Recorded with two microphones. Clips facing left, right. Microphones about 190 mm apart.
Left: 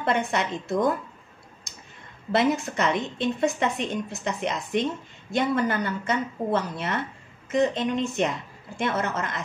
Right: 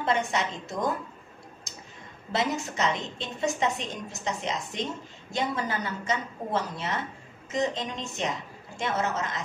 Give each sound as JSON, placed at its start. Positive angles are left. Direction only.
{"t": 0.0, "sound": "a woman's voice", "side_deg": 60}
{"t": 1.7, "sound": "clicking", "side_deg": 55}
{"t": 2.3, "sound": "a woman's voice", "side_deg": 55}